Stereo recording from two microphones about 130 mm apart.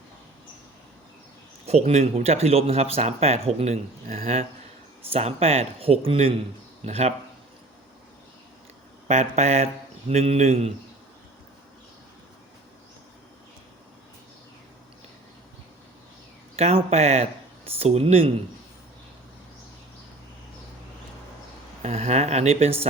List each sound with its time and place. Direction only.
1.6 s speech: 55° right (ahead or behind)
4.0 s speech: 90° right
5.1 s a woman's voice: 50° right (ahead or behind)
9.0 s a woman's voice: 60° right (ahead or behind)
16.6 s speech: 55° right (ahead or behind)
21.8 s a woman's voice: 55° right (ahead or behind)